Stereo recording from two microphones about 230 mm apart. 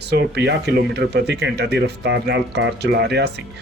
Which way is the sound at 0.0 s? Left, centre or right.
Right.